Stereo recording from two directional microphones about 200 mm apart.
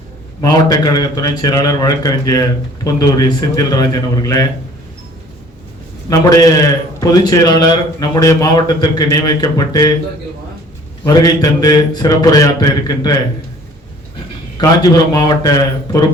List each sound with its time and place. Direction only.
0.4 s a man's voice: 20° left (ahead or behind)
6.1 s a man's voice: 15° left (ahead or behind)
11.0 s a man's voice: 20° left (ahead or behind)
14.6 s a man's voice: 20° left (ahead or behind)